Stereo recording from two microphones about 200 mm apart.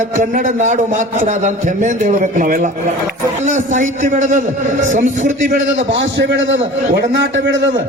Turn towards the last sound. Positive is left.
turn(degrees=-65)  # may be behind; listen again after turning